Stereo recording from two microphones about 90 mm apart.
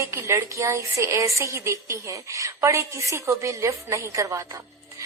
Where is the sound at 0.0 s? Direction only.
30° right (ahead or behind).